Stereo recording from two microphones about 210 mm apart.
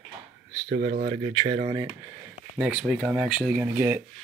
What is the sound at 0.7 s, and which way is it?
Speech, 40° right (ahead or behind).